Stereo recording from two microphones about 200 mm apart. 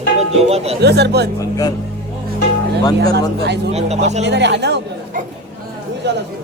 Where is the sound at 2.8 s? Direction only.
20° left (ahead or behind).